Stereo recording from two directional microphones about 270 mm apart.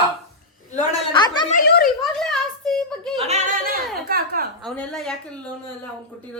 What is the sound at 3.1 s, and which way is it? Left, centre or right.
Yodeling, right.